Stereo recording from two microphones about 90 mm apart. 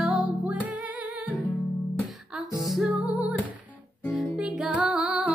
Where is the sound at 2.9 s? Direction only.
15° right (ahead or behind).